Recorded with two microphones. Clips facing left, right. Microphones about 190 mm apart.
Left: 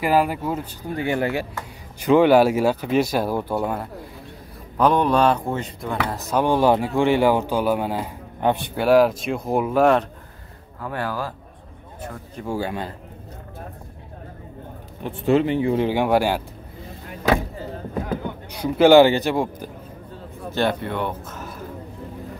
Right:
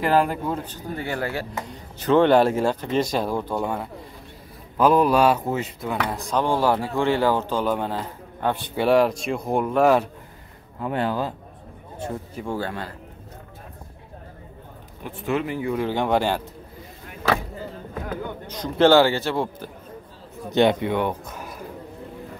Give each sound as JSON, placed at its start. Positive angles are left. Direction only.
{"t": 0.0, "sound": "a man's voice", "side_deg": 10}
{"t": 6.4, "sound": "a man's voice", "side_deg": 20}
{"t": 8.7, "sound": "speech", "side_deg": 0}
{"t": 10.8, "sound": "speech", "side_deg": -20}
{"t": 12.4, "sound": "a man's voice", "side_deg": 10}
{"t": 15.0, "sound": "speech", "side_deg": 30}
{"t": 15.9, "sound": "a man's voice", "side_deg": 10}
{"t": 18.5, "sound": "a man's voice", "side_deg": 10}
{"t": 20.5, "sound": "speech", "side_deg": -15}